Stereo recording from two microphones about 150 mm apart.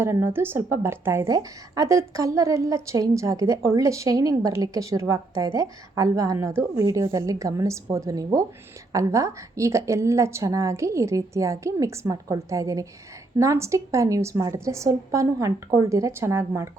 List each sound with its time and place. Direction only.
0.0 s a woman's voice: 15° right (ahead or behind)